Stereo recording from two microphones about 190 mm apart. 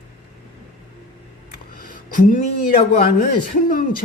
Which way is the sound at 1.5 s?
45° left (ahead or behind).